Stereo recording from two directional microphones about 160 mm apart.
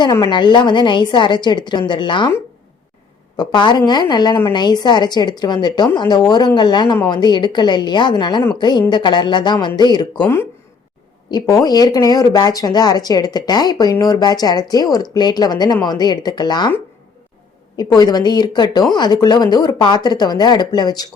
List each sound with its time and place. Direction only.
0.0 s a woman's voice: 25° left (ahead or behind)
3.3 s a woman's voice: 30° left (ahead or behind)
17.7 s a woman's voice: 25° left (ahead or behind)